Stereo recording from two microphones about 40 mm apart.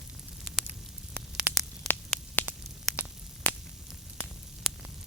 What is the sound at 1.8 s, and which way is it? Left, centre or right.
Static, centre.